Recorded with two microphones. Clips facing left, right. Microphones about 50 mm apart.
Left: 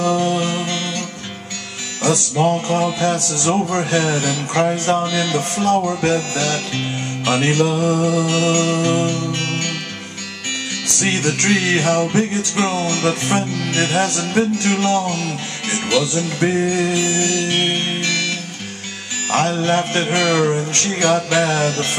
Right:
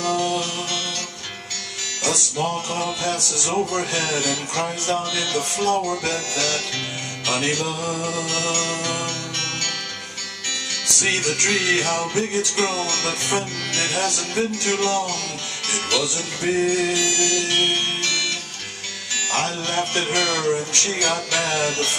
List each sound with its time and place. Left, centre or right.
0.0 s music: centre
2.0 s music: left
2.8 s music: centre; by 6.2 s left
6.3 s music: left
7.6 s music: left
8.3 s music: left
11.4 s music: left
12.5 s music: centre
14.0 s music: left
15.0 s speech: left
16.4 s music: left
17.0 s music: left
19.3 s music: left
21.4 s music: centre